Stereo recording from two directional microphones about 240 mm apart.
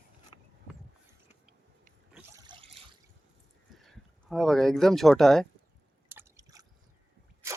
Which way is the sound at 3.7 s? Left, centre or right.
Centre.